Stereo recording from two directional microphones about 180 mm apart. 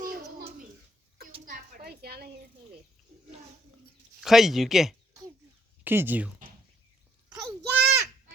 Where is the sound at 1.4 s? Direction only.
50° right (ahead or behind).